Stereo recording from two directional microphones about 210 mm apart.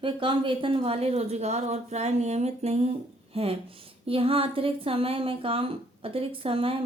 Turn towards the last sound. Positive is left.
turn(degrees=-25)  # may be behind; listen again after turning